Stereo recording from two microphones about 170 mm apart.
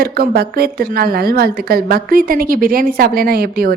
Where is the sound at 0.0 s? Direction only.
65° right (ahead or behind).